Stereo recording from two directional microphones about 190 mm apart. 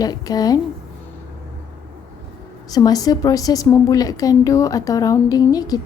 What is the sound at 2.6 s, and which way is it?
A woman's voice, 20° left (ahead or behind).